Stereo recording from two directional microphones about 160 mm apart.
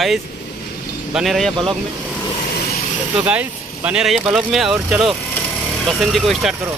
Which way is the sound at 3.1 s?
10° right (ahead or behind).